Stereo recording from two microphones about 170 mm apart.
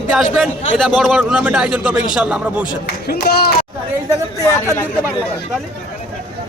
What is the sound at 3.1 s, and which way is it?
Speech, 65° left (ahead or behind).